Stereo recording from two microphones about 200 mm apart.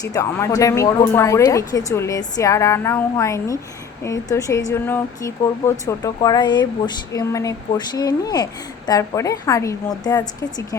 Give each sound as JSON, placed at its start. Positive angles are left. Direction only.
{"t": 0.0, "sound": "speech", "side_deg": 15}